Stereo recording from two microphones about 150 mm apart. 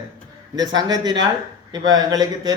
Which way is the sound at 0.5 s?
25° right (ahead or behind).